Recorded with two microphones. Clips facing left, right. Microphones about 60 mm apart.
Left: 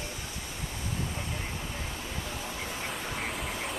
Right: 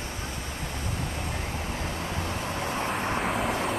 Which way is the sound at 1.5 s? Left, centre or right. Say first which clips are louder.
Right 5 dB; right.